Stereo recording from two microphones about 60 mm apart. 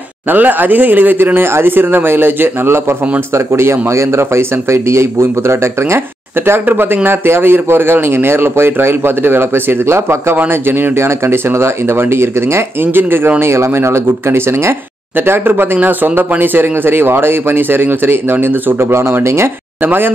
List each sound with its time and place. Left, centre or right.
0.3 s speech: right
3.3 s speech: right
15.2 s speech: right
19.8 s speech: right